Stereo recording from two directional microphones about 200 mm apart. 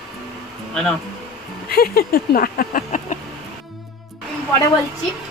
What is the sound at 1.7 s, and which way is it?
Speech, 50° left (ahead or behind).